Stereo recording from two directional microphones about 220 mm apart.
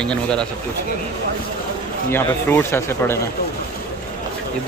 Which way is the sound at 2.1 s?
10° left (ahead or behind).